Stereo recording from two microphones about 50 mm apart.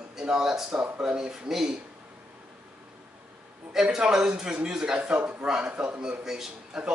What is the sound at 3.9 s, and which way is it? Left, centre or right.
Speech, centre.